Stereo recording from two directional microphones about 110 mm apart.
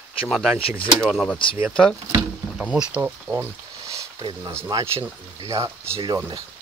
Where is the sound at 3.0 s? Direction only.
15° right (ahead or behind).